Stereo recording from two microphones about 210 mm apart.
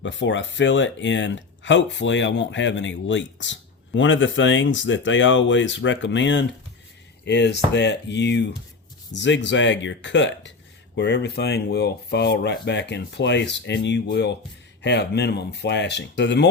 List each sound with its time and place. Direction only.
0.0 s speech: 60° left (ahead or behind)